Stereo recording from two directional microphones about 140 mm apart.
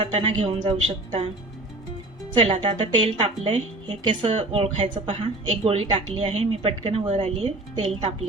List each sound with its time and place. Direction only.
0.0 s a woman's voice: 40° right (ahead or behind)
2.3 s a woman's voice: 40° right (ahead or behind)